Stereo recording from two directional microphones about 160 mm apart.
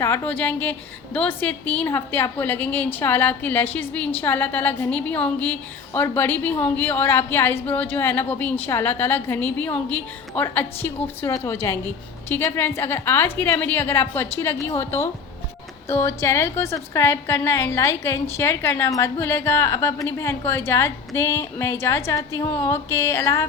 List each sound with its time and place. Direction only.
0.0 s a woman's voice: 15° left (ahead or behind)